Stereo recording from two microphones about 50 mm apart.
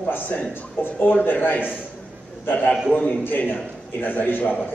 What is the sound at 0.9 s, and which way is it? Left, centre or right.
Speech, left.